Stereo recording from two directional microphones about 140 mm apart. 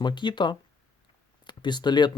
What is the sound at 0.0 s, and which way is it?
Speech, 35° left (ahead or behind).